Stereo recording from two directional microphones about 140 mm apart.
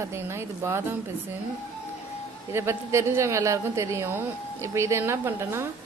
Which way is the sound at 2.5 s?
20° right (ahead or behind).